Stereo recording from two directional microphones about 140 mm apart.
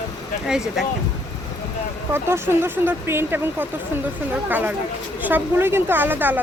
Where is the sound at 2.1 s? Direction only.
15° right (ahead or behind).